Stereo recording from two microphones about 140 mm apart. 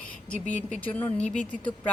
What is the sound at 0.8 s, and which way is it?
Speech, 10° left (ahead or behind).